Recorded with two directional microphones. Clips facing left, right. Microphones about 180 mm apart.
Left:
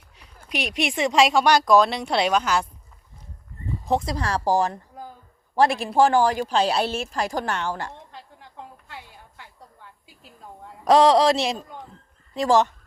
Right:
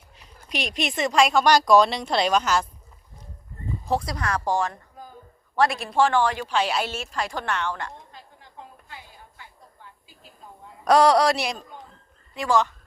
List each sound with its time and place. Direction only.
0.4 s speech: 5° left (ahead or behind)
1.5 s speech: 5° left (ahead or behind)
3.8 s speech: 25° left (ahead or behind)
5.9 s speech: 40° left (ahead or behind)
10.8 s a man's voice: 20° left (ahead or behind)
12.3 s speech: 40° left (ahead or behind)